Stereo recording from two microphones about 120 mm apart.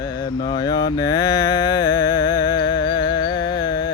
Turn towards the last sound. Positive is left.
turn(degrees=35)  # may be behind; listen again after turning